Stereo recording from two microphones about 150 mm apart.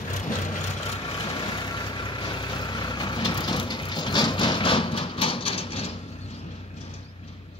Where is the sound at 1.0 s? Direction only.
30° left (ahead or behind).